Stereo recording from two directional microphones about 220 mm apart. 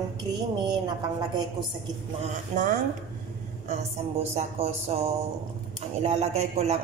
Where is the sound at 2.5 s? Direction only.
35° right (ahead or behind).